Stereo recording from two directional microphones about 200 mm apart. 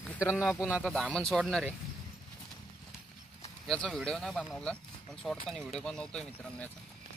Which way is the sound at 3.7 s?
Centre (ahead or behind).